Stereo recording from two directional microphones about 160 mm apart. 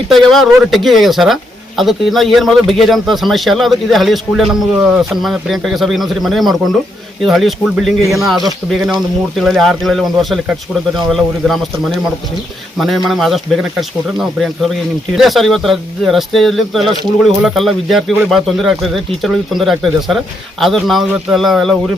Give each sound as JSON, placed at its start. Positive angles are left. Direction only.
{"t": 0.1, "sound": "speech", "side_deg": 0}